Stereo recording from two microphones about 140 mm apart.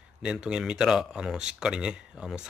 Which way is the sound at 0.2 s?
5° right (ahead or behind).